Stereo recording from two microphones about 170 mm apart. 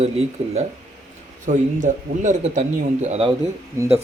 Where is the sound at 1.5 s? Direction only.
45° right (ahead or behind).